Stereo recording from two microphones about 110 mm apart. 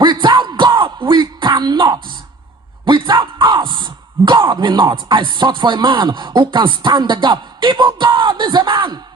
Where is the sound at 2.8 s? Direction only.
45° right (ahead or behind).